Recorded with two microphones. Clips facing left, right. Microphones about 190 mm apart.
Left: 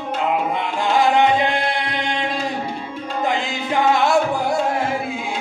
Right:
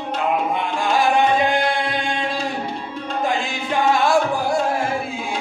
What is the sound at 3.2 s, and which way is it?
Music, 20° left (ahead or behind).